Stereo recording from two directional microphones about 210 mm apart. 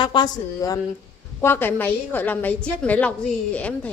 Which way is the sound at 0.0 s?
20° left (ahead or behind).